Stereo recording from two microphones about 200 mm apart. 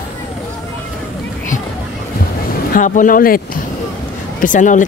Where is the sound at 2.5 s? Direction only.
40° left (ahead or behind).